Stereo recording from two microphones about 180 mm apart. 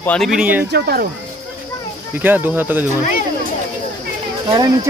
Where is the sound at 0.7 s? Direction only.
60° right (ahead or behind).